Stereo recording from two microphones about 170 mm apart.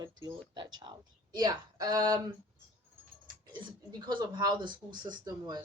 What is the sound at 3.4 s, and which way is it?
Speech, 25° right (ahead or behind).